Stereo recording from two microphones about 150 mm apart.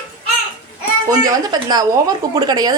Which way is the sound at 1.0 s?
25° right (ahead or behind).